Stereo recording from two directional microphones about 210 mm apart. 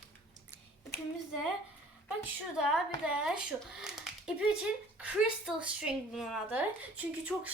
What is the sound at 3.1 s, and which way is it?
A woman's voice, 5° right (ahead or behind).